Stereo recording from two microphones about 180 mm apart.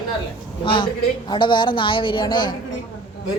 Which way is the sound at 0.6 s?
30° left (ahead or behind).